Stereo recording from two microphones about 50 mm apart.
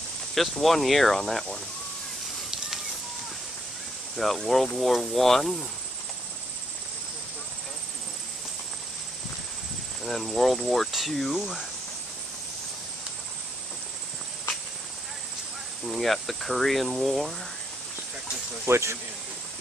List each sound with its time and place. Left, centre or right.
0.3 s speech: centre
4.2 s speech: centre
10.0 s speech: centre
15.8 s speech: centre
18.7 s speech: right